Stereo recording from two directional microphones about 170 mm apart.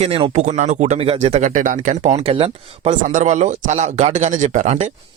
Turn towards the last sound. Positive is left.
turn(degrees=-45)  # may be behind; listen again after turning